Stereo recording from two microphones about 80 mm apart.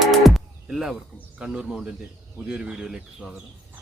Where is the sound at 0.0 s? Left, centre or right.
Centre.